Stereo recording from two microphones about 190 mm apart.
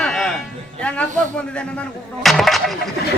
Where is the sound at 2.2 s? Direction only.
Centre (ahead or behind).